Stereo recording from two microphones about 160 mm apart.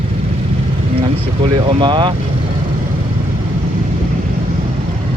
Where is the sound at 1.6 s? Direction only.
30° right (ahead or behind).